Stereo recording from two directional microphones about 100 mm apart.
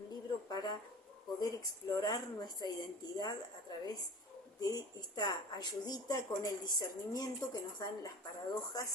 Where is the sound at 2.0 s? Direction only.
40° left (ahead or behind).